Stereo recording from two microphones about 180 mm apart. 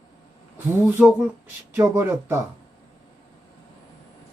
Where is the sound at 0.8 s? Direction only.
10° right (ahead or behind).